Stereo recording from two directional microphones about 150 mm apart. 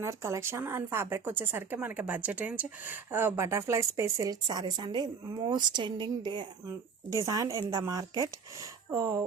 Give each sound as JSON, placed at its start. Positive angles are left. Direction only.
{"t": 0.0, "sound": "a woman's voice", "side_deg": -20}
{"t": 6.7, "sound": "speech", "side_deg": -20}